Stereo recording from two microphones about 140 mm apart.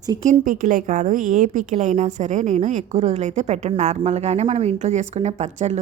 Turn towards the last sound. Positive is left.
turn(degrees=-55)  # may be behind; listen again after turning